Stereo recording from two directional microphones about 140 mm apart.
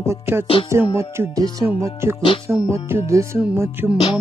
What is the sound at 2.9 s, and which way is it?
Music, 20° right (ahead or behind).